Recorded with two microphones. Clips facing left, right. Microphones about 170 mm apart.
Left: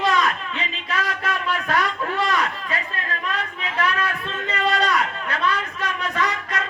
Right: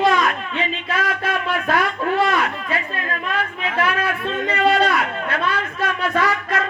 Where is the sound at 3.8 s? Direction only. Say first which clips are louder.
Right 2 dB; 30° right (ahead or behind).